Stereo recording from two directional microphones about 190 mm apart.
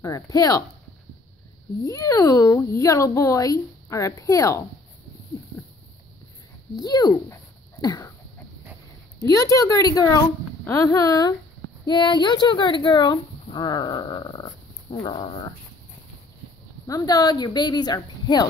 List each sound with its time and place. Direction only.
0.0 s speech: 20° left (ahead or behind)
1.9 s speech: 15° left (ahead or behind)
6.8 s speech: 20° left (ahead or behind)
9.2 s speech: 20° left (ahead or behind)
16.8 s speech: 20° left (ahead or behind)